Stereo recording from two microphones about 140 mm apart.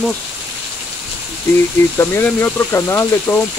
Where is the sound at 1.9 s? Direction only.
15° left (ahead or behind).